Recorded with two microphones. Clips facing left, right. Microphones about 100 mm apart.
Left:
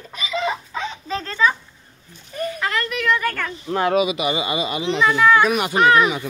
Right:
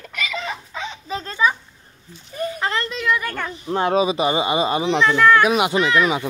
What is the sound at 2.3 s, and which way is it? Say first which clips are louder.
Speech: even; 25° right (ahead or behind).